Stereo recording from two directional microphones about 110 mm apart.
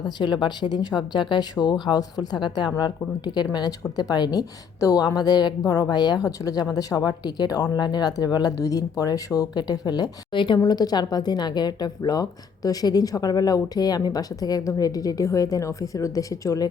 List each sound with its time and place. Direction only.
0.0 s a woman's voice: 45° left (ahead or behind)